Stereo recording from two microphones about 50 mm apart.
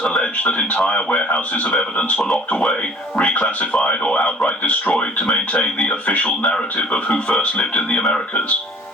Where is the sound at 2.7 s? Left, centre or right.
Left.